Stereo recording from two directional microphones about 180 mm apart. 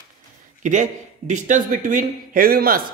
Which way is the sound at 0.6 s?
45° right (ahead or behind).